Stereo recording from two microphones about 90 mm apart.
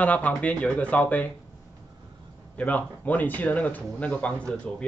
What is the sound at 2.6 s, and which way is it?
A man's voice, 15° left (ahead or behind).